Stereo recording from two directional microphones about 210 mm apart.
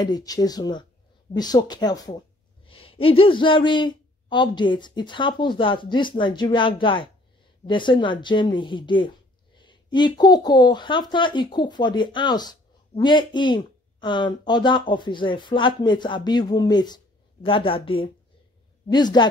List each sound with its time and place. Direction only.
0.0 s speech: 20° left (ahead or behind)